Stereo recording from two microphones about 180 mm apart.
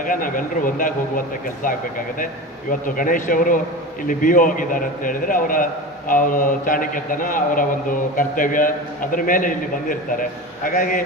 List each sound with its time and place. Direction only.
0.0 s a man's voice: 50° left (ahead or behind)
2.6 s a man's voice: 50° left (ahead or behind)